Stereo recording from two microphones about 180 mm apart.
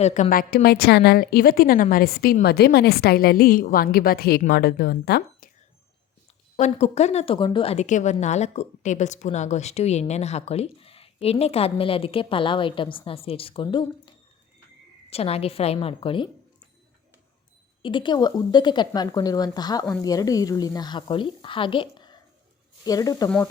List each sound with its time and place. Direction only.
0.0 s a woman's voice: 40° left (ahead or behind); by 5.5 s 60° left (ahead or behind)
6.6 s a woman's voice: 40° left (ahead or behind)
15.1 s a woman's voice: 35° left (ahead or behind)
17.8 s a woman's voice: 25° left (ahead or behind)